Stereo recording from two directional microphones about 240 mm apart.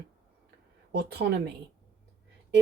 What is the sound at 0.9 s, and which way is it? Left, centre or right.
Speech, right.